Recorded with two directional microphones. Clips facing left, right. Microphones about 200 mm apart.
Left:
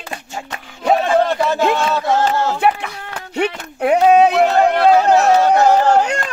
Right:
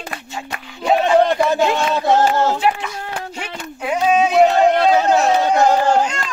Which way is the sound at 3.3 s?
65° left (ahead or behind).